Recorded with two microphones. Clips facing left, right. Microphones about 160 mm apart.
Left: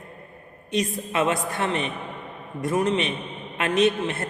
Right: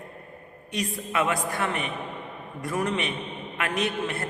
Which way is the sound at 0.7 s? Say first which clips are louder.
Left 3 dB; 25° left (ahead or behind).